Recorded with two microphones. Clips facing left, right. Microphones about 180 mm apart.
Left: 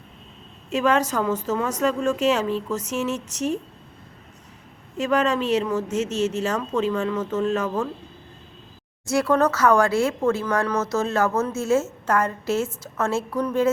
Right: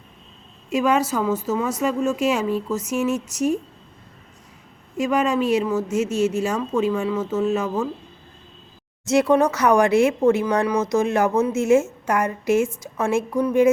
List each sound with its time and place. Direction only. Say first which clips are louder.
0.7 s a woman's voice: right 1 dB; 10° right (ahead or behind)
4.9 s a woman's voice: right 1 dB; 10° right (ahead or behind)
9.0 s a woman's voice: right 3 dB; 20° right (ahead or behind)